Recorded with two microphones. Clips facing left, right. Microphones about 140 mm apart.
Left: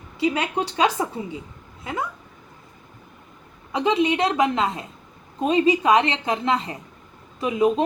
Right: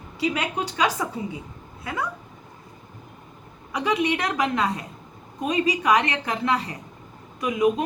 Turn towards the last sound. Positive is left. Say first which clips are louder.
# left 1 dB
turn(degrees=30)  # may be behind; listen again after turning